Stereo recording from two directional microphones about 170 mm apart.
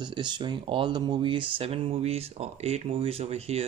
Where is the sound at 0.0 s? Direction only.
25° right (ahead or behind).